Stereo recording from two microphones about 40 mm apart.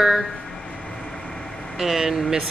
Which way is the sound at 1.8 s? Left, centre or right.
Centre.